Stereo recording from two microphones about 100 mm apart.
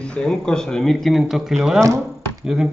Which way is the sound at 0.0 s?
10° left (ahead or behind).